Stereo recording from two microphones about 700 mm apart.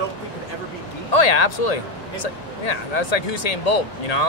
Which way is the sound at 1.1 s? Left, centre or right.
Left.